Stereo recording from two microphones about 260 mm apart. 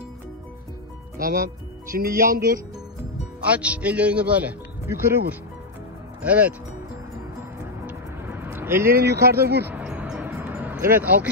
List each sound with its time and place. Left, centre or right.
1.9 s speech: right
3.4 s speech: centre
6.2 s speech: centre
7.8 s music: centre
8.9 s speech: right
9.7 s a sound: centre